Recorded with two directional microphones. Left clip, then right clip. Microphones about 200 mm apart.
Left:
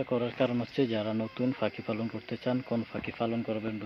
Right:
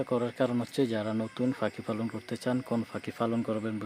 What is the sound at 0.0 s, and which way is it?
Speech, 15° right (ahead or behind).